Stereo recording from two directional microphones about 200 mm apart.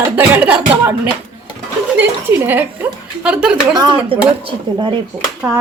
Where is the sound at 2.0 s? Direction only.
10° right (ahead or behind).